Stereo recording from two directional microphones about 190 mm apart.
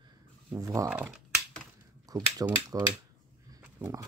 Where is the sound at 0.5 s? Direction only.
15° right (ahead or behind).